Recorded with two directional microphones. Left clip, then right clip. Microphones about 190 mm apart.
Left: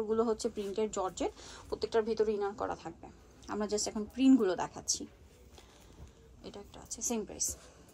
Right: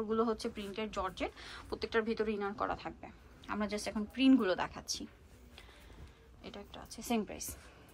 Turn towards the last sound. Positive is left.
turn(degrees=10)  # may be behind; listen again after turning